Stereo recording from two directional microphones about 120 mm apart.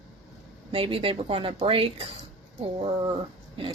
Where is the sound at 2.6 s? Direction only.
45° right (ahead or behind).